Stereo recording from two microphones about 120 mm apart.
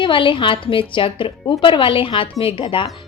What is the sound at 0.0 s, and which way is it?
Speech, 45° left (ahead or behind).